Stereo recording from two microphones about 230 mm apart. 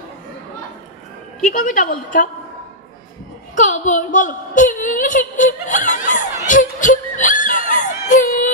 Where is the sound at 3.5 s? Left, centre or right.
Left.